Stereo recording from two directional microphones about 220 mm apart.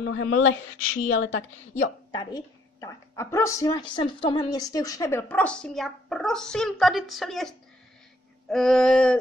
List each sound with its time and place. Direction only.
0.0 s speech: 60° left (ahead or behind)
2.1 s a woman's voice: 15° left (ahead or behind)
8.5 s a sound: centre (ahead or behind)